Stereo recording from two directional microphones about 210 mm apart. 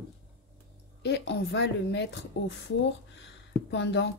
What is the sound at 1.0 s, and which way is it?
A woman's voice, 55° left (ahead or behind).